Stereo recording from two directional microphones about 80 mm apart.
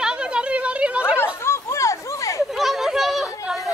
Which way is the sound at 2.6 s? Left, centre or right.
Centre.